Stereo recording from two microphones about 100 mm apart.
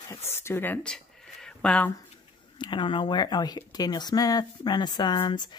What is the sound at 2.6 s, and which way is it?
Speech, 50° left (ahead or behind).